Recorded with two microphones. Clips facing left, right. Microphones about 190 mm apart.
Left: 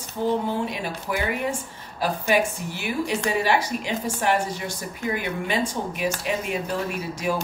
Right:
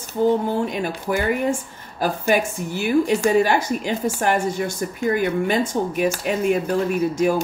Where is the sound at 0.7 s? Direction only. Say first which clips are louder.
Right 5 dB; 50° right (ahead or behind).